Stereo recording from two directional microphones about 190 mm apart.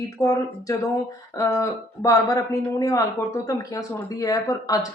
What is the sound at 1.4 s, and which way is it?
Speech, 15° left (ahead or behind).